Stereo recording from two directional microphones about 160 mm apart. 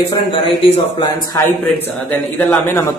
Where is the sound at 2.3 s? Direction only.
15° left (ahead or behind).